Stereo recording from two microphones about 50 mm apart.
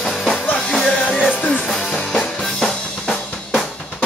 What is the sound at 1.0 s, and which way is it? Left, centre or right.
Music, left.